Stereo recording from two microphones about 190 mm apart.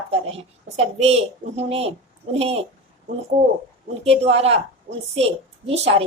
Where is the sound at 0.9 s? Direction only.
35° right (ahead or behind).